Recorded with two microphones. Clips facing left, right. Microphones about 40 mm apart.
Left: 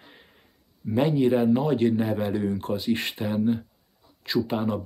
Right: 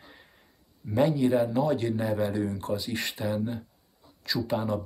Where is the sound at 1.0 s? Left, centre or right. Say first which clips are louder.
Left 2 dB; left.